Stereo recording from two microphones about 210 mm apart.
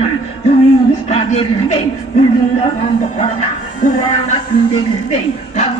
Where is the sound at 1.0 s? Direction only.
30° left (ahead or behind).